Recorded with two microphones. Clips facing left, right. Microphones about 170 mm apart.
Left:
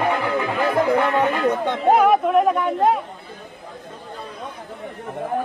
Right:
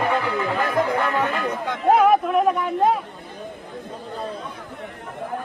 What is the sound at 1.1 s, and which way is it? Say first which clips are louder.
Speech: left 4 dB; 30° left (ahead or behind).